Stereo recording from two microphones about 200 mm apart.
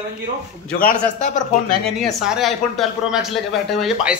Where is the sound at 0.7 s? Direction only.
45° left (ahead or behind).